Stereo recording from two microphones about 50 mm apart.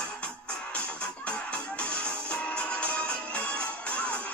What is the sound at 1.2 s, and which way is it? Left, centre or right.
Music, left.